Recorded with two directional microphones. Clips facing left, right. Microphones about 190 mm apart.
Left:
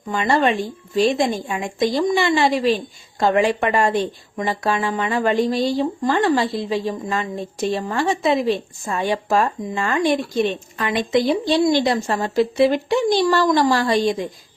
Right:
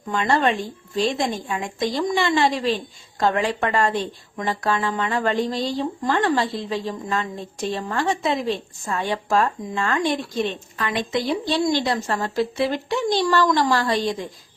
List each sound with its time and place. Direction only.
0.1 s a woman's voice: 10° left (ahead or behind)